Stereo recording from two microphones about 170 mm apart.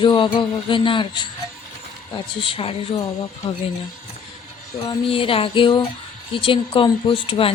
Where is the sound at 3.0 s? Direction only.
20° left (ahead or behind).